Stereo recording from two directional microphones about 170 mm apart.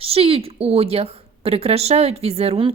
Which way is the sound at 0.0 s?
35° right (ahead or behind).